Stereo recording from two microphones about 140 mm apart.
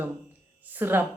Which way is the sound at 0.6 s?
15° right (ahead or behind).